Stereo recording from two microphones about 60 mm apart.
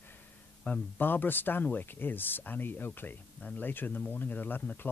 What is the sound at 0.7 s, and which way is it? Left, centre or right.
Speech, left.